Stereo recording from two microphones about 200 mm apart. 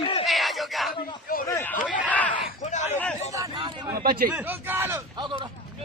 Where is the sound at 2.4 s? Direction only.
35° left (ahead or behind).